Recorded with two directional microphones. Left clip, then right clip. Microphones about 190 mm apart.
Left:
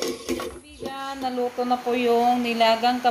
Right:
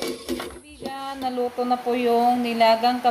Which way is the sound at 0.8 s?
Centre (ahead or behind).